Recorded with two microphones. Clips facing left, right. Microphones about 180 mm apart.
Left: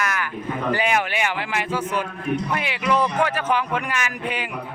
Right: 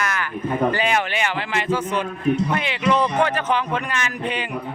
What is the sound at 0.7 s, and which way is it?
A man's voice, 10° left (ahead or behind).